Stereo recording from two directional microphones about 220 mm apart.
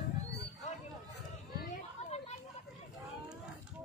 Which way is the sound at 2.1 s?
30° left (ahead or behind).